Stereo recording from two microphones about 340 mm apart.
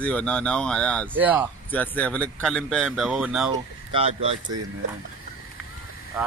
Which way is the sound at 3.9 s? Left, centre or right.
Centre.